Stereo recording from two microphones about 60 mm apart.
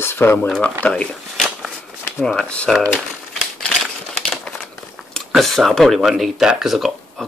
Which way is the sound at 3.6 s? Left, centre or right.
Centre.